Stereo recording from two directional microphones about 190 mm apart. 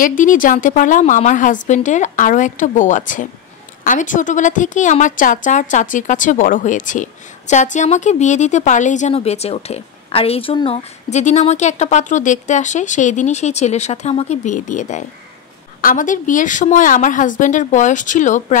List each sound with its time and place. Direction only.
0.0 s a woman's voice: 45° left (ahead or behind)